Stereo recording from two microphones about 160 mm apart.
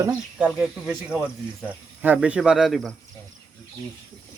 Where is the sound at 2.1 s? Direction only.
5° right (ahead or behind).